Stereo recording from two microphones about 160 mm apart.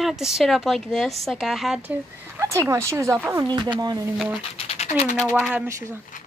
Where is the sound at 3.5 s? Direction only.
25° right (ahead or behind).